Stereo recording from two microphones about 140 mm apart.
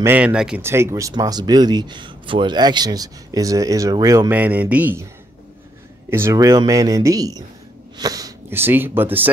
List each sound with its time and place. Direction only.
0.0 s speech: 10° right (ahead or behind)
0.6 s speech: 20° right (ahead or behind)
4.3 s speech: 10° right (ahead or behind)
6.0 s speech: 15° right (ahead or behind)